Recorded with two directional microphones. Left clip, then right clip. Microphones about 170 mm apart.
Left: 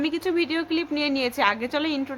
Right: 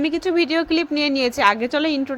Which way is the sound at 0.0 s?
30° right (ahead or behind).